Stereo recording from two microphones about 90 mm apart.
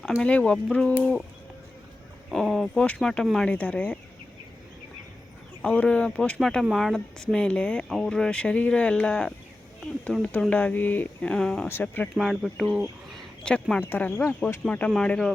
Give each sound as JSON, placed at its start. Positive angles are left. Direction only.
{"t": 0.2, "sound": "speech", "side_deg": 15}
{"t": 2.3, "sound": "speech", "side_deg": 0}
{"t": 2.7, "sound": "speech", "side_deg": 15}
{"t": 5.6, "sound": "speech", "side_deg": 15}
{"t": 11.6, "sound": "speech", "side_deg": 25}
{"t": 12.1, "sound": "speech", "side_deg": 0}
{"t": 13.4, "sound": "speech", "side_deg": 10}